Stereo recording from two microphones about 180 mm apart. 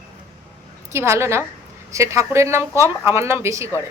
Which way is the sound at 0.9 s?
15° right (ahead or behind).